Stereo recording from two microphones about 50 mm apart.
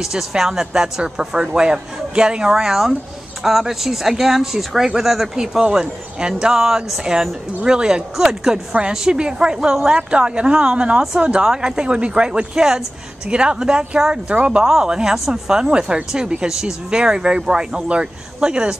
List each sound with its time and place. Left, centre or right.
0.0 s speech: centre